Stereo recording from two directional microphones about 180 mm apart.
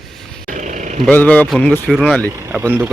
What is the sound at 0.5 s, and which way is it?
Vehicle, 45° right (ahead or behind).